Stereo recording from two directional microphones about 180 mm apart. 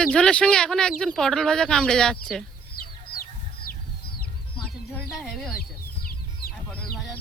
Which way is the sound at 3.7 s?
55° left (ahead or behind).